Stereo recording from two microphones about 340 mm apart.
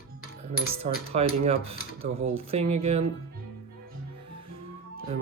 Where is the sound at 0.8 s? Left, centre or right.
Centre.